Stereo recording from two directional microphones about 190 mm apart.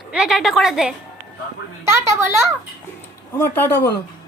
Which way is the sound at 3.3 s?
10° left (ahead or behind).